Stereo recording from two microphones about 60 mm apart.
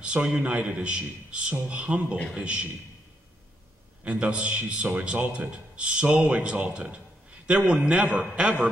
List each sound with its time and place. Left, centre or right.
0.0 s a man's voice: centre
4.0 s a man's voice: centre